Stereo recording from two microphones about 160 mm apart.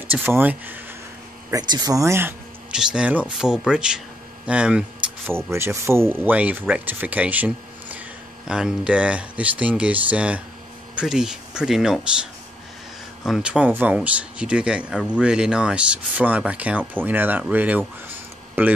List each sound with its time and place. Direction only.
0.1 s speech: 10° right (ahead or behind)
1.5 s speech: 25° right (ahead or behind)
2.7 s speech: 5° right (ahead or behind)
13.2 s speech: 5° right (ahead or behind)